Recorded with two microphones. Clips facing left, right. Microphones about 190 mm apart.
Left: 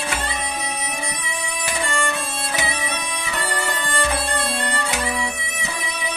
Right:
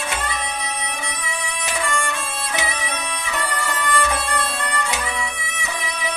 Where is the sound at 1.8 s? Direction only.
30° left (ahead or behind).